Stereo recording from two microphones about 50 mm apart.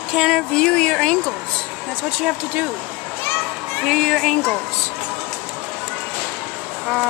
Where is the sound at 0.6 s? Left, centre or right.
Centre.